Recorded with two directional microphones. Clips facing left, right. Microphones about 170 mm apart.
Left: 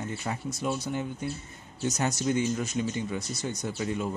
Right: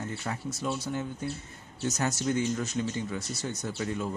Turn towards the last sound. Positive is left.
turn(degrees=15)  # may be behind; listen again after turning